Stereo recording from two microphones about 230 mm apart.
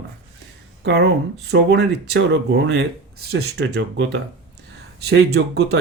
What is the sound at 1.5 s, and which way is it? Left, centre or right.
Speech, right.